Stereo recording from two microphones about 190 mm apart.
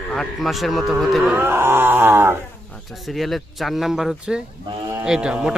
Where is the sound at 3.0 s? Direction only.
Centre (ahead or behind).